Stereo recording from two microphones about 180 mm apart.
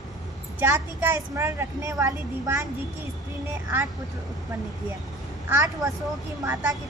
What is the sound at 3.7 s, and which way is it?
Speech, 10° right (ahead or behind).